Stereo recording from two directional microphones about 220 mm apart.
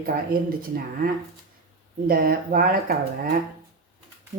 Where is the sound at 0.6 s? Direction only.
40° right (ahead or behind).